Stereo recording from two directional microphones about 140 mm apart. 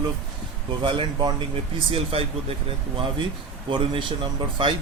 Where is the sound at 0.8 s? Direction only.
35° right (ahead or behind).